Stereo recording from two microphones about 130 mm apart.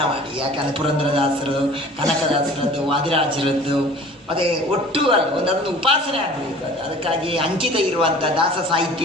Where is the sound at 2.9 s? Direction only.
45° right (ahead or behind).